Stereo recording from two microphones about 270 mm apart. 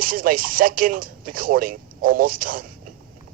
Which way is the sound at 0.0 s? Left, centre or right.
Right.